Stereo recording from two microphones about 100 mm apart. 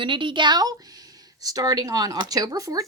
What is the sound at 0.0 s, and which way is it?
A woman's voice, 55° right (ahead or behind).